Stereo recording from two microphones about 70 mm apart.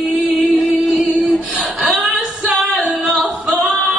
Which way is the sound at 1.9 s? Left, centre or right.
Centre.